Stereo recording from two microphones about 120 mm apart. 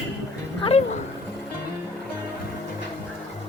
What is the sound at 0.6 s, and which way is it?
Speech, 50° left (ahead or behind).